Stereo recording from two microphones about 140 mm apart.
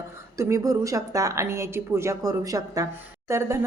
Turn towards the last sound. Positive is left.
turn(degrees=-20)  # may be behind; listen again after turning